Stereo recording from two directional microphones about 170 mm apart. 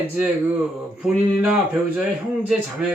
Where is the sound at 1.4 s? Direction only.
5° right (ahead or behind).